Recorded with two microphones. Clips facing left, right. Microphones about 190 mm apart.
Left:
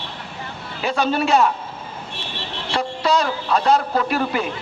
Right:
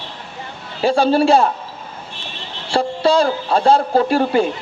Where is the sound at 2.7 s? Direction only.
30° right (ahead or behind).